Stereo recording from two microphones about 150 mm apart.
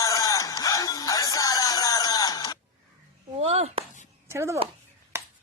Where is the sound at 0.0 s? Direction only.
20° left (ahead or behind).